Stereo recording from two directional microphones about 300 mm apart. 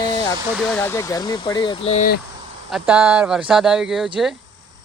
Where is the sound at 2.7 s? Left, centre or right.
Centre.